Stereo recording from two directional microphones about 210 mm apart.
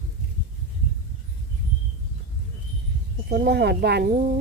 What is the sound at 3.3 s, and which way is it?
Speech, 50° right (ahead or behind).